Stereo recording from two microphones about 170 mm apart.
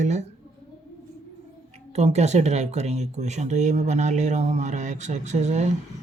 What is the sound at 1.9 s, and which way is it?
Speech, 40° right (ahead or behind).